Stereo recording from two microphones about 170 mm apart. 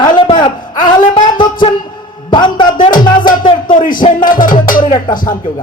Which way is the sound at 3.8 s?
55° left (ahead or behind).